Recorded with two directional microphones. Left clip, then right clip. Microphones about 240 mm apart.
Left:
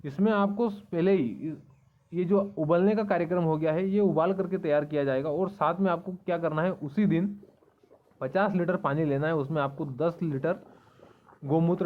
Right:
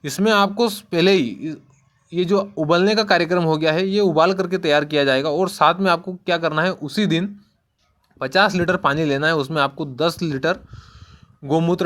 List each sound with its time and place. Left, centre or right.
0.0 s speech: right